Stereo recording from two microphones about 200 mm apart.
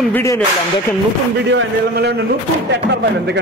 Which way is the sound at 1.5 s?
55° right (ahead or behind).